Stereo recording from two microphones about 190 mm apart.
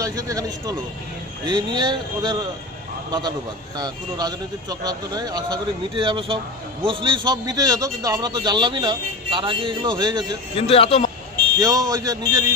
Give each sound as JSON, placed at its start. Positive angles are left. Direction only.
{"t": 0.0, "sound": "speech", "side_deg": -20}
{"t": 10.5, "sound": "speech", "side_deg": 30}
{"t": 11.5, "sound": "speech", "side_deg": -20}